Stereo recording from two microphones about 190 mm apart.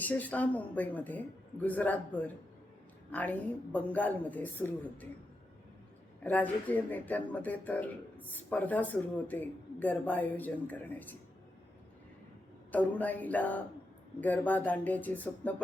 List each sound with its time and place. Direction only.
0.0 s speech: 10° left (ahead or behind)
6.2 s speech: 10° left (ahead or behind)
12.7 s speech: 10° left (ahead or behind)